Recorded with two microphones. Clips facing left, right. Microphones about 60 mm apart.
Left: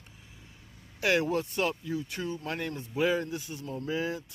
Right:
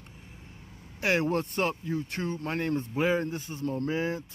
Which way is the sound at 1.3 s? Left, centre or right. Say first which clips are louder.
Right 1 dB; right.